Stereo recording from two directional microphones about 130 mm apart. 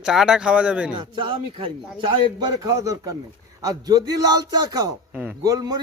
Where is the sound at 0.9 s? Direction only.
40° right (ahead or behind).